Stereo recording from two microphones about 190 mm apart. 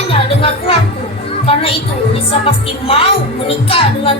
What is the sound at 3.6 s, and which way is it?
Speech, 30° left (ahead or behind).